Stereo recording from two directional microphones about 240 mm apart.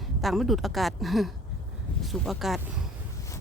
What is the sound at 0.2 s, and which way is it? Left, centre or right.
Speech, centre.